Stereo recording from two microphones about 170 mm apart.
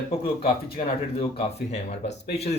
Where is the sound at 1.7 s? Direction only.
40° left (ahead or behind).